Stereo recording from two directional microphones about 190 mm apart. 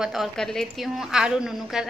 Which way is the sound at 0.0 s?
Centre (ahead or behind).